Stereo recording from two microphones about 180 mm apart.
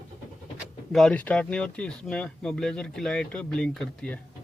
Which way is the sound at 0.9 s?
5° left (ahead or behind).